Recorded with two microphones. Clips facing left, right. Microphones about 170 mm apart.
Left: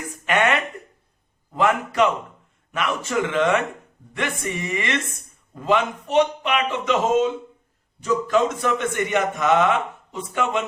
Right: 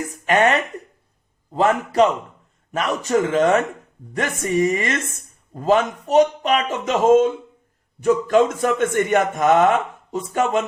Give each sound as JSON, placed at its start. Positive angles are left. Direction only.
{"t": 0.3, "sound": "a man's voice", "side_deg": -35}